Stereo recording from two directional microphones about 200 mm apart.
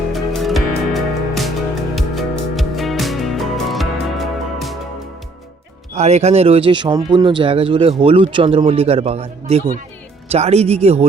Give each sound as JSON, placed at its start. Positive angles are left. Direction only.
{"t": 0.1, "sound": "music", "side_deg": 0}
{"t": 5.9, "sound": "speech", "side_deg": -35}